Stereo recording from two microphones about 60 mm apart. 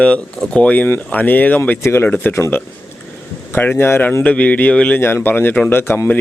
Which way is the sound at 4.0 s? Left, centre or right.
Left.